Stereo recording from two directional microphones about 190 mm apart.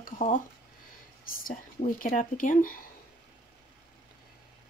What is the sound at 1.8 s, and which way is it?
Speech, 40° left (ahead or behind).